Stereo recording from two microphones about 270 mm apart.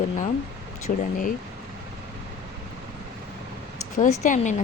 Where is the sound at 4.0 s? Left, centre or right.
Left.